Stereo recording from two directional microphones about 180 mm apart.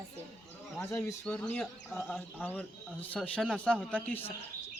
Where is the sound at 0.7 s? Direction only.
15° left (ahead or behind).